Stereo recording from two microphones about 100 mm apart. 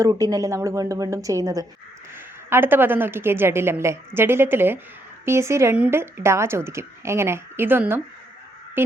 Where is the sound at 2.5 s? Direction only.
20° right (ahead or behind).